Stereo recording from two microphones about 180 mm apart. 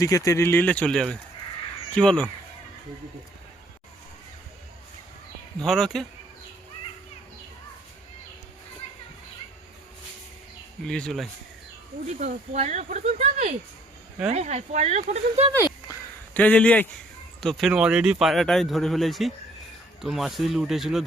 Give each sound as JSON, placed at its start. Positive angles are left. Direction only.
{"t": 0.3, "sound": "speech", "side_deg": 15}
{"t": 5.5, "sound": "speech", "side_deg": 0}
{"t": 10.8, "sound": "speech", "side_deg": 5}
{"t": 12.2, "sound": "speech", "side_deg": -40}
{"t": 15.5, "sound": "a sound", "side_deg": 15}
{"t": 17.4, "sound": "speech", "side_deg": 0}